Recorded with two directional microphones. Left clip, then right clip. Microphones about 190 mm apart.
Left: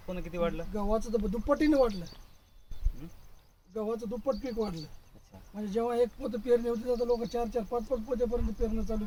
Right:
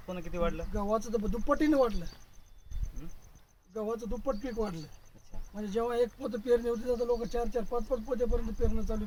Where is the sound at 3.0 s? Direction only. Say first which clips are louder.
Left 3 dB; 15° left (ahead or behind).